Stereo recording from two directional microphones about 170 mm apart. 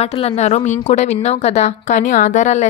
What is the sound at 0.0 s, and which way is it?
Speech, 40° left (ahead or behind).